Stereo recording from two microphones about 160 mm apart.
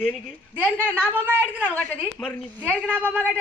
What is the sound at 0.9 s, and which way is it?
A woman's voice, 10° right (ahead or behind).